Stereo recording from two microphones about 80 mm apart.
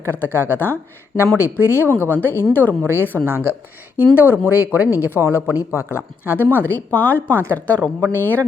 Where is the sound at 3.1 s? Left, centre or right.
Right.